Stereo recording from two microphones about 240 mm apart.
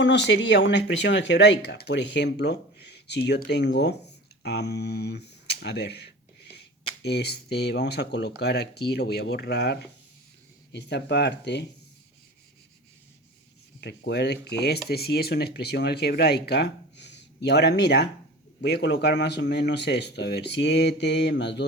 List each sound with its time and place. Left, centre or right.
0.0 s speech: left
7.0 s speech: left
13.8 s speech: left